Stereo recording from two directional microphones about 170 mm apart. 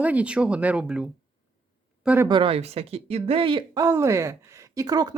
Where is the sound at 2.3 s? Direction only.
30° right (ahead or behind).